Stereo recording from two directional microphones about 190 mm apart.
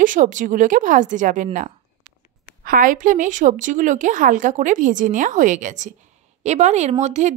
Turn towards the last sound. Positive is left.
turn(degrees=-40)  # may be behind; listen again after turning